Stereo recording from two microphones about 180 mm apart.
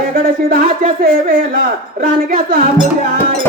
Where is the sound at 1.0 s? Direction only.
55° right (ahead or behind).